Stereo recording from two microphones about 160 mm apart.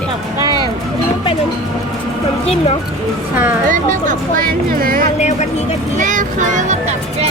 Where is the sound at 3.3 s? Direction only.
15° right (ahead or behind).